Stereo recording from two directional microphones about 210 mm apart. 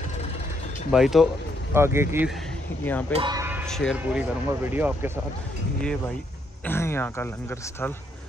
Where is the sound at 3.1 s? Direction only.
20° right (ahead or behind).